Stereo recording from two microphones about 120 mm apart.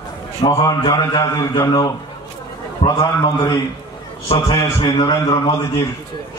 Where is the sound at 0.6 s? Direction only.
35° left (ahead or behind).